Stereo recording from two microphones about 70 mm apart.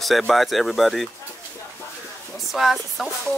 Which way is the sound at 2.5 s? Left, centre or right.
Centre.